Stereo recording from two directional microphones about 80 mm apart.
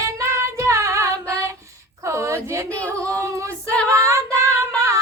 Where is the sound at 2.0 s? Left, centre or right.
Right.